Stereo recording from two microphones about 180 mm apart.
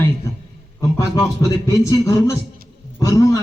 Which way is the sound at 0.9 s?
15° left (ahead or behind).